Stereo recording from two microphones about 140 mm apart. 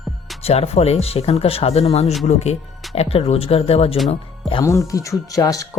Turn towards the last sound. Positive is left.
turn(degrees=25)  # may be behind; listen again after turning